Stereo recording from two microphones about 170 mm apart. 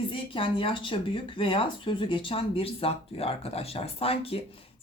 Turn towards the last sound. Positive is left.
turn(degrees=35)  # may be behind; listen again after turning